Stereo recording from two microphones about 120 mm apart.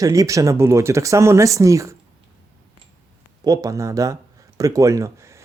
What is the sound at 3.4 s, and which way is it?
Speech, 30° right (ahead or behind).